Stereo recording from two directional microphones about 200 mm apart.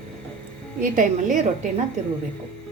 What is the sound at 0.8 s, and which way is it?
Speech, 40° right (ahead or behind).